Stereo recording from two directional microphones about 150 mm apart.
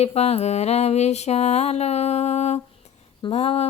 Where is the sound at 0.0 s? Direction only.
45° left (ahead or behind).